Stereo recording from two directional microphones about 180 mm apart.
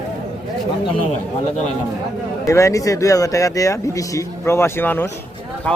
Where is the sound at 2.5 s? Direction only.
15° left (ahead or behind).